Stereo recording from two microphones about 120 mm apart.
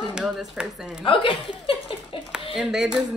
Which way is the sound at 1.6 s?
45° left (ahead or behind).